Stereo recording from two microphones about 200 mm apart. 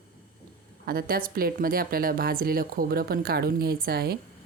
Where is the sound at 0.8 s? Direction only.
50° right (ahead or behind).